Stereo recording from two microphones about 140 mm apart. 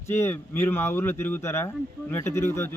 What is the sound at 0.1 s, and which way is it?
A man's voice, 15° left (ahead or behind).